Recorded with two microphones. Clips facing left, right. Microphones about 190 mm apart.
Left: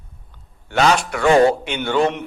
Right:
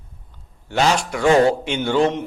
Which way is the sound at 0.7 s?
65° left (ahead or behind).